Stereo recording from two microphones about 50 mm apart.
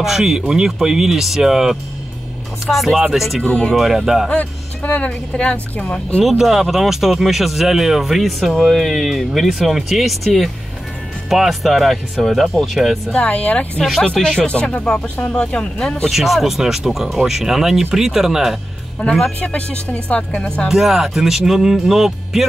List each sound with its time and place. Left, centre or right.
0.0 s speech: centre
3.4 s speech: centre
3.7 s speech: centre
4.8 s speech: left
6.2 s speech: centre
13.1 s speech: left
14.1 s speech: centre
14.4 s speech: left
16.1 s speech: centre
19.0 s a man's voice: left
19.4 s speech: left
20.6 s speech: centre